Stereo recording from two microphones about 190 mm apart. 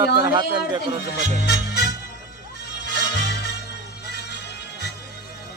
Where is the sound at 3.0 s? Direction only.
60° left (ahead or behind).